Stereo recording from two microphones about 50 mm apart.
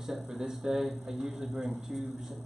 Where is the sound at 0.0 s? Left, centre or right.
Centre.